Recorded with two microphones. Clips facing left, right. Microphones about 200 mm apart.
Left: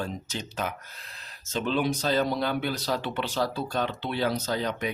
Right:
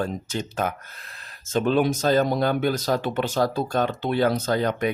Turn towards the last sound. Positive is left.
turn(degrees=-55)  # may be behind; listen again after turning